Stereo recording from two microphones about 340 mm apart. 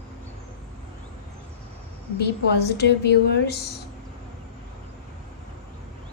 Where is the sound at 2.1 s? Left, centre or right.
Left.